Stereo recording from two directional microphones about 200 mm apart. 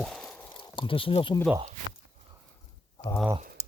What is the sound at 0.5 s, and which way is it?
Speech, 25° left (ahead or behind).